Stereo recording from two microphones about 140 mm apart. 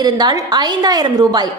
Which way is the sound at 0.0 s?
30° right (ahead or behind).